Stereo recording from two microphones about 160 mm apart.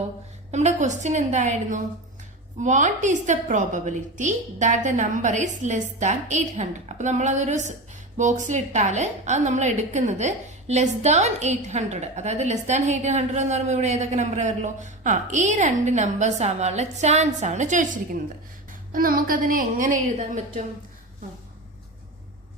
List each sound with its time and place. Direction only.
0.5 s a woman's voice: 50° right (ahead or behind)
18.9 s a woman's voice: 60° right (ahead or behind)